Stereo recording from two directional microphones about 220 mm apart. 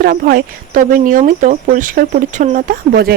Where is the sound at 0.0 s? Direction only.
45° right (ahead or behind).